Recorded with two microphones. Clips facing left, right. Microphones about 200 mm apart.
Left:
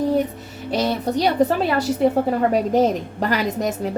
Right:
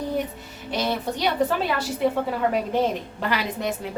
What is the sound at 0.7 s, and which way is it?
A woman's voice, 40° left (ahead or behind).